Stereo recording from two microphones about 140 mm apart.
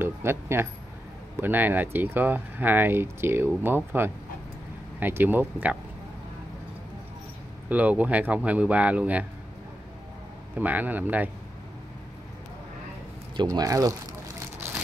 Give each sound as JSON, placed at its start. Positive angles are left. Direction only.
{"t": 0.0, "sound": "speech", "side_deg": -15}
{"t": 7.7, "sound": "speech", "side_deg": -10}
{"t": 10.6, "sound": "speech", "side_deg": -10}
{"t": 13.4, "sound": "speech", "side_deg": -25}